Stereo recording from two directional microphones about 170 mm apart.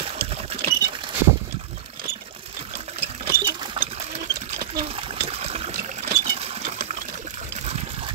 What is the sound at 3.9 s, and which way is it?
Sewing machine, 40° right (ahead or behind).